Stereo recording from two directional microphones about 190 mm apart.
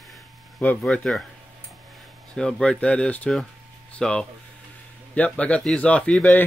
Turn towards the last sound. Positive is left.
turn(degrees=5)  # may be behind; listen again after turning